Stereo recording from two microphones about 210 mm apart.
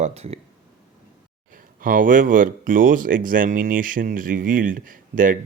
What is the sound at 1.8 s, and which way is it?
Speech, 40° right (ahead or behind).